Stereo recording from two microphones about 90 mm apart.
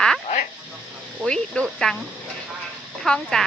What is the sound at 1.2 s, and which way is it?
Speech, 10° left (ahead or behind).